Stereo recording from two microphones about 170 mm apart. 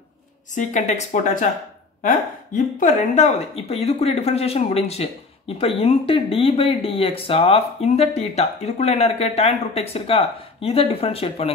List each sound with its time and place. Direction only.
0.6 s speech: 45° left (ahead or behind)